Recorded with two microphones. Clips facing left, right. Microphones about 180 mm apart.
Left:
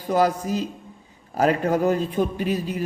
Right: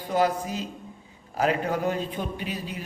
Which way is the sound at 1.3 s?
45° left (ahead or behind).